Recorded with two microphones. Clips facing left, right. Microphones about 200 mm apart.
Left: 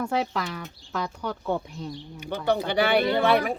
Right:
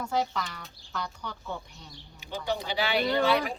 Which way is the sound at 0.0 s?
65° left (ahead or behind).